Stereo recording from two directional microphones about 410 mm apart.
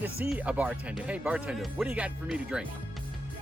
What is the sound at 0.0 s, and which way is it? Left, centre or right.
Speech, centre.